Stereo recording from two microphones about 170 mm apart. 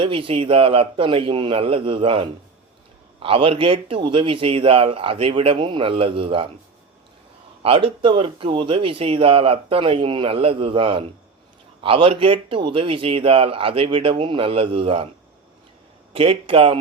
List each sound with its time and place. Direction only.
0.0 s speech: 30° right (ahead or behind)
7.6 s speech: 30° right (ahead or behind)
16.1 s speech: 35° right (ahead or behind)